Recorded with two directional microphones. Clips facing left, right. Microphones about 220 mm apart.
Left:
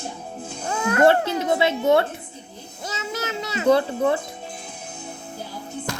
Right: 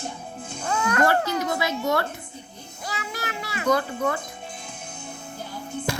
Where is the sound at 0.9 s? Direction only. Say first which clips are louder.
Left 6 dB; 25° left (ahead or behind).